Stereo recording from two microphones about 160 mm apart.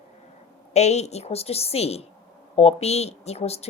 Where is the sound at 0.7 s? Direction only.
45° left (ahead or behind).